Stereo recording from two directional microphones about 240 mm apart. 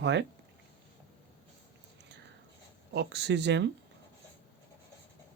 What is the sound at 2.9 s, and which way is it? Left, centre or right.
Speech, right.